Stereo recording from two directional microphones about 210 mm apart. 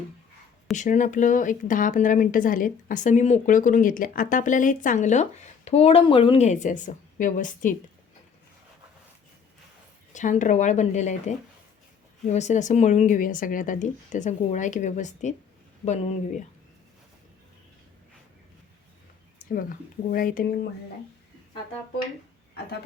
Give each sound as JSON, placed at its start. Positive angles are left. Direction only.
{"t": 0.8, "sound": "speech", "side_deg": 35}
{"t": 10.1, "sound": "speech", "side_deg": 35}
{"t": 19.4, "sound": "a sound", "side_deg": 40}
{"t": 20.1, "sound": "speech", "side_deg": 40}